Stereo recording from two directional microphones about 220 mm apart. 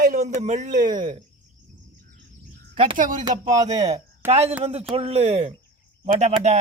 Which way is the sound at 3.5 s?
15° right (ahead or behind).